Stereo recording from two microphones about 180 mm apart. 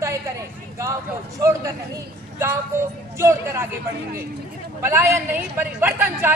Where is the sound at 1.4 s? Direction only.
15° right (ahead or behind).